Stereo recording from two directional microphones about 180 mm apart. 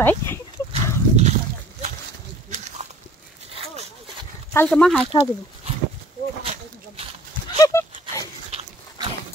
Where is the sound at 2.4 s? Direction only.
40° right (ahead or behind).